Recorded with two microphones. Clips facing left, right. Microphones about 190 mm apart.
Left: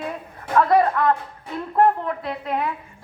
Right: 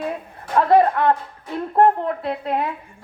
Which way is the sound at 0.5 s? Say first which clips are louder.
Right 2 dB; 30° right (ahead or behind).